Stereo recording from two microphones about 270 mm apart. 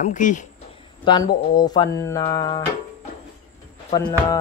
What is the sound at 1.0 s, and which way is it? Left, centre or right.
Speech, centre.